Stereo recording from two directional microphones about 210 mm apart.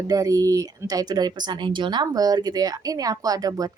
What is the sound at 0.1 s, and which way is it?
Speech, 15° right (ahead or behind).